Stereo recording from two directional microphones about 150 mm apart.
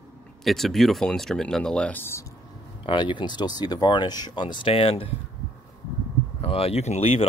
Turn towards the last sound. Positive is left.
turn(degrees=40)  # may be behind; listen again after turning